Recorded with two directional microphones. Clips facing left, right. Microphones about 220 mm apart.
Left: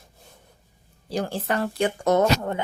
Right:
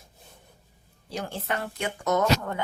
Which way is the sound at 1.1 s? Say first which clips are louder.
Left 5 dB; 35° left (ahead or behind).